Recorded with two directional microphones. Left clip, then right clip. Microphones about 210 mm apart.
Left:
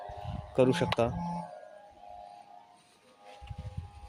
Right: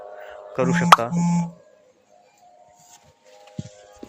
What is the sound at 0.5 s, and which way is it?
Speech, 15° left (ahead or behind).